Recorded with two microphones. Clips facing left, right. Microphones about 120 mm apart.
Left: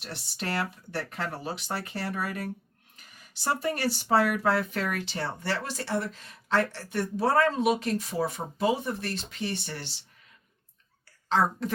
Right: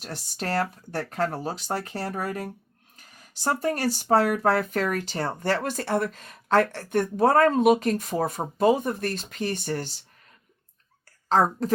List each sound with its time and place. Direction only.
0.0 s speech: 40° right (ahead or behind)
11.3 s speech: 40° right (ahead or behind)